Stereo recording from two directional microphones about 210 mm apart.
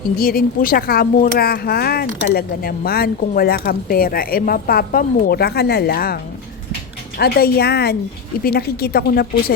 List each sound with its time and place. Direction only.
0.2 s speech: 45° left (ahead or behind)
7.2 s speech: 50° left (ahead or behind)